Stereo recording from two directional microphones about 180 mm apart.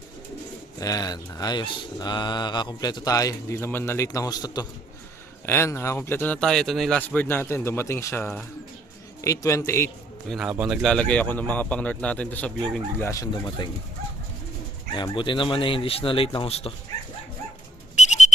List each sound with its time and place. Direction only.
0.8 s speech: 20° left (ahead or behind)
10.2 s speech: centre (ahead or behind)
13.1 s speech: 15° left (ahead or behind)
14.9 s speech: 25° left (ahead or behind)
17.9 s a sound: 40° left (ahead or behind)